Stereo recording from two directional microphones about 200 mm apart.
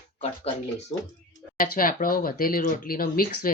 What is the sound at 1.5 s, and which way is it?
Speech, 45° left (ahead or behind).